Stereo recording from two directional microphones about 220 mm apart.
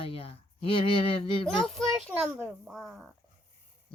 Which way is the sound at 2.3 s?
5° right (ahead or behind).